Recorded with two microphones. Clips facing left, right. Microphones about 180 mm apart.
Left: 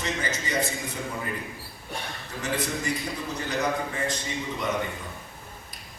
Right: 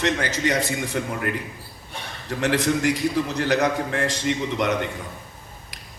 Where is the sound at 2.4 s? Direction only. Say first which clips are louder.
Right 9 dB; 80° right.